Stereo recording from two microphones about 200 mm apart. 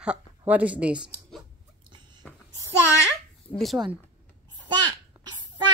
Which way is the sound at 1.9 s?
20° right (ahead or behind).